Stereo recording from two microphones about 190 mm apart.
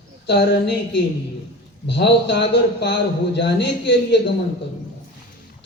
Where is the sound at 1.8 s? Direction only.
65° left (ahead or behind).